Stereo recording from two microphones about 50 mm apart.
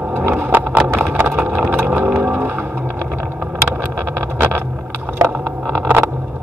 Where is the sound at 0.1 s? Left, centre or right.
Right.